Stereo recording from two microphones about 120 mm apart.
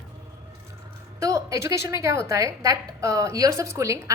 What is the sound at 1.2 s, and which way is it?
A woman's voice, 25° right (ahead or behind).